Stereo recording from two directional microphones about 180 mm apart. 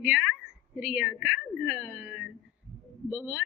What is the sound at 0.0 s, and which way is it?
A woman's voice, 5° right (ahead or behind).